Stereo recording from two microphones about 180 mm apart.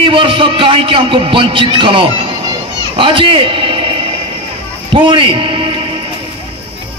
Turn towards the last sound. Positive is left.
turn(degrees=-30)  # may be behind; listen again after turning